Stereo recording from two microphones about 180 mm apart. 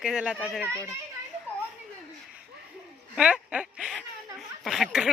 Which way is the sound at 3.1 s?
5° right (ahead or behind).